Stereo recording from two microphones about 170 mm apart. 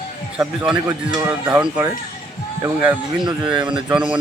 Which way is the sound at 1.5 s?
10° right (ahead or behind).